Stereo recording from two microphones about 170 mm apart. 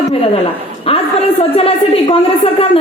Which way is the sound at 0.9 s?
35° left (ahead or behind).